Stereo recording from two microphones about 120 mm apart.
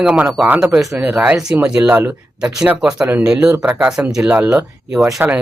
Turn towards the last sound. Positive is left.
turn(degrees=-5)  # may be behind; listen again after turning